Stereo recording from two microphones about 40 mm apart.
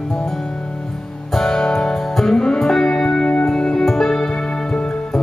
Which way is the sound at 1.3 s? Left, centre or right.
Centre.